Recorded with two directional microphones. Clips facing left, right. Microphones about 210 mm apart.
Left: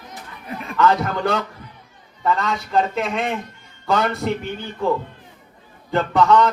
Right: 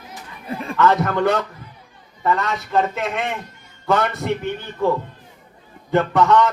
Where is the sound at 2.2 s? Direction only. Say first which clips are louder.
Even; centre (ahead or behind).